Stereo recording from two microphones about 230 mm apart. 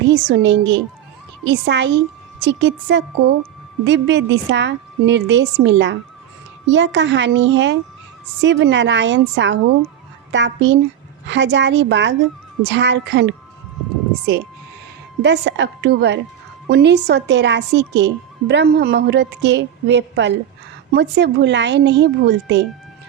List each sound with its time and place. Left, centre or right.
0.1 s a woman's voice: right
15.2 s a woman's voice: right